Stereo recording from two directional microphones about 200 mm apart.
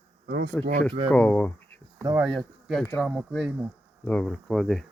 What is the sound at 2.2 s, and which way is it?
Speech, centre (ahead or behind).